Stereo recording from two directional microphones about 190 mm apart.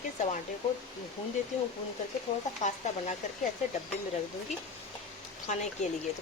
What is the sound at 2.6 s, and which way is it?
Speech, 40° left (ahead or behind).